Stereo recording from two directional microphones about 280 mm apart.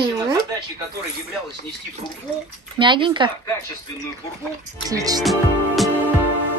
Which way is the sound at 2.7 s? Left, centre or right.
Centre.